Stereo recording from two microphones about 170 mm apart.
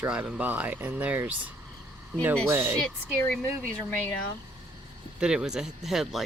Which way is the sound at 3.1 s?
10° left (ahead or behind).